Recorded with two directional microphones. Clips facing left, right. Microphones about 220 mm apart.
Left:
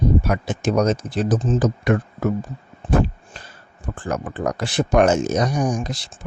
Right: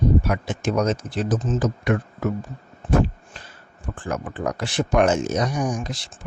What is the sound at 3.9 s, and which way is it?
Speech, 35° left (ahead or behind).